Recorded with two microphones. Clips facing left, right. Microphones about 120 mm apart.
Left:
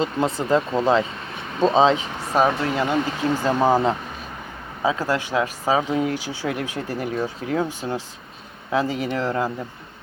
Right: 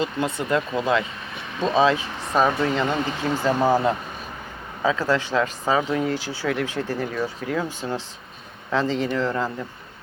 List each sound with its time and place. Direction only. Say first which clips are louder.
0.0 s speech: left 2 dB; 30° left (ahead or behind)
2.3 s speech: even; 5° left (ahead or behind)
3.4 s speech: even; 20° left (ahead or behind)